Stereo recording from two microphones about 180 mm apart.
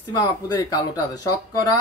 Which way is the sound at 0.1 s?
20° left (ahead or behind).